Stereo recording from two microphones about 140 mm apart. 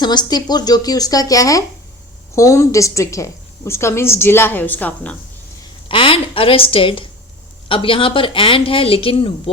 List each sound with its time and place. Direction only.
0.0 s a woman's voice: 30° left (ahead or behind); by 5.1 s 10° left (ahead or behind)
5.9 s speech: 40° left (ahead or behind)